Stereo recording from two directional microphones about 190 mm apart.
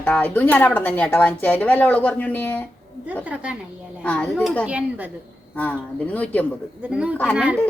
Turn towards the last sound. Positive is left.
turn(degrees=-5)  # may be behind; listen again after turning